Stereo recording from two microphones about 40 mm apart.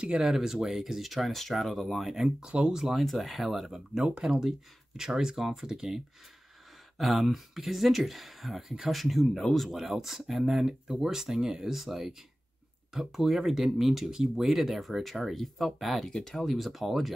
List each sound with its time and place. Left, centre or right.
0.2 s speech: centre
2.1 s speech: centre
2.7 s speech: centre
3.6 s speech: centre
7.0 s speech: centre
16.1 s speech: centre